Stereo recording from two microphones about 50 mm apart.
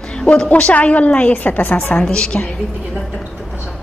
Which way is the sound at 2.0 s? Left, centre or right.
Centre.